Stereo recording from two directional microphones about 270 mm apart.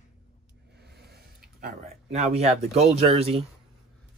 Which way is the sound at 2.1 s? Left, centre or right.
Right.